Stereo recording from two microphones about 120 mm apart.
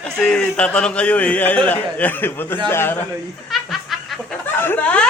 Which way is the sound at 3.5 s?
Centre (ahead or behind).